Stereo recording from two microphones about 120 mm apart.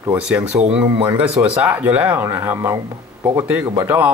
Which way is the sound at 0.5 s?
15° right (ahead or behind).